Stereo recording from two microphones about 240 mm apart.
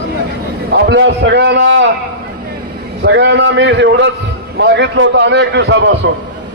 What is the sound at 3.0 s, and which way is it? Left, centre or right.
A man's voice, right.